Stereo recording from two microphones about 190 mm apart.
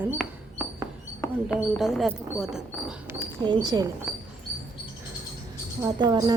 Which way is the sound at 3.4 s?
20° right (ahead or behind).